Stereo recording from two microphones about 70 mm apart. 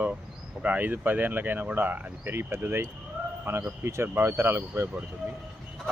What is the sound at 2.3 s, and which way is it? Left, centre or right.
Speech, right.